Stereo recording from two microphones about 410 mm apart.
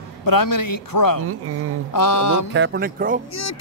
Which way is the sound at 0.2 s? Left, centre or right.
Left.